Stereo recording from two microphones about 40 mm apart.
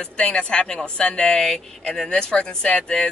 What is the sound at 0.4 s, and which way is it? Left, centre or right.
Speech, left.